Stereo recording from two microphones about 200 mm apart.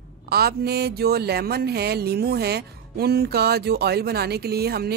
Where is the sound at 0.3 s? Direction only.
50° right (ahead or behind).